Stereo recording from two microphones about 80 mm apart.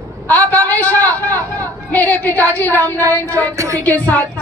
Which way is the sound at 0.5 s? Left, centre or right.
Left.